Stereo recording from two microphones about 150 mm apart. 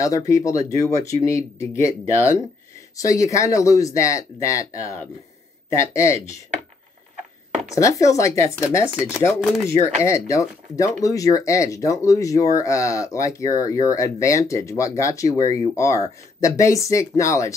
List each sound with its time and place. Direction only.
0.0 s speech: 20° left (ahead or behind)
7.7 s speech: 20° left (ahead or behind)
8.9 s speech: 5° right (ahead or behind)
10.0 s speech: 20° left (ahead or behind)